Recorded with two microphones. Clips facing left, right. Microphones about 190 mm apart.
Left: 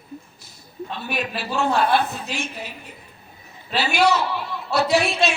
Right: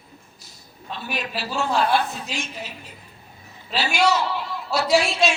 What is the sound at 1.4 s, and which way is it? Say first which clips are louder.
A woman's voice: left 1 dB; 60° left (ahead or behind).